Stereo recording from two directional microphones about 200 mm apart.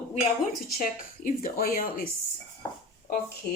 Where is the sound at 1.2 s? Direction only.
45° left (ahead or behind).